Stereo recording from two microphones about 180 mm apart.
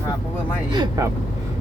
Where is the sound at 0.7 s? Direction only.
25° right (ahead or behind).